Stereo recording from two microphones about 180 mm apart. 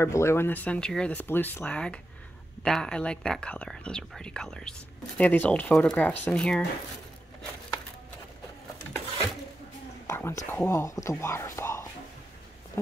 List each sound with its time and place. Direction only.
0.0 s speech: 15° left (ahead or behind)
10.0 s speech: 15° left (ahead or behind)
12.8 s a sound: 15° left (ahead or behind)